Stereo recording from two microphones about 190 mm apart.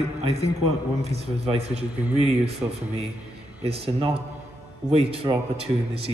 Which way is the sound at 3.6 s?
30° right (ahead or behind).